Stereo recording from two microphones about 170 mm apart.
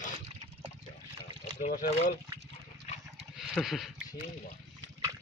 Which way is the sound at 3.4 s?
Centre (ahead or behind).